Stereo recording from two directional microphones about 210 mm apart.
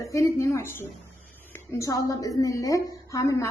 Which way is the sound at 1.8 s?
15° left (ahead or behind).